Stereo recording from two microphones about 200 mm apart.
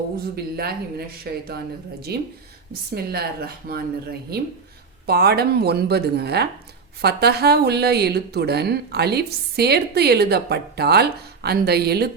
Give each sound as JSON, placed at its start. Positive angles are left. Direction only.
{"t": 0.3, "sound": "speech", "side_deg": -50}